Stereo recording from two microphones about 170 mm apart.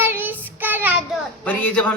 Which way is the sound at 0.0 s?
10° right (ahead or behind).